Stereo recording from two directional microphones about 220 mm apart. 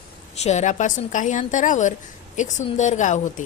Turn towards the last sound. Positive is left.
turn(degrees=35)  # may be behind; listen again after turning